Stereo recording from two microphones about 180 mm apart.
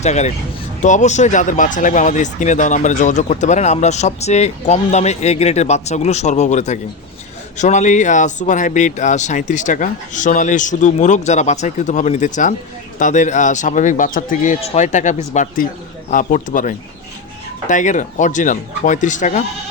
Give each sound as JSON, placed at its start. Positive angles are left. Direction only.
{"t": 0.0, "sound": "speech", "side_deg": 40}